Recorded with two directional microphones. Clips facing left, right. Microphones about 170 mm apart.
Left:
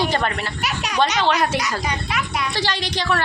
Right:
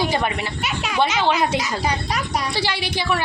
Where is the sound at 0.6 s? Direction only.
25° right (ahead or behind).